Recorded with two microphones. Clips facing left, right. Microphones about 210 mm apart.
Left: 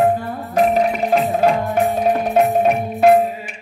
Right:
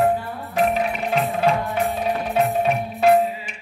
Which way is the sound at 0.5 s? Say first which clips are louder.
Left 5 dB; 45° left (ahead or behind).